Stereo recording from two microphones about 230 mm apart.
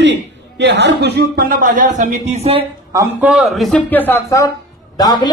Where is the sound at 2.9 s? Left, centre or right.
Centre.